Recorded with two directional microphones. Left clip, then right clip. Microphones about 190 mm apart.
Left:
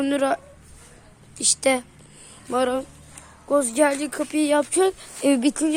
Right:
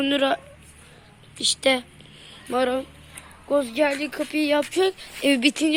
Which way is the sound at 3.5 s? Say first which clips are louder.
Left 2 dB; 15° left (ahead or behind).